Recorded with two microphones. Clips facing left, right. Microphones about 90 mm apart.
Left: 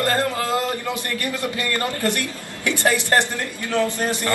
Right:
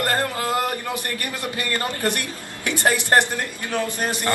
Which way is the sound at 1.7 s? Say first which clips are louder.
Even; 25° right (ahead or behind).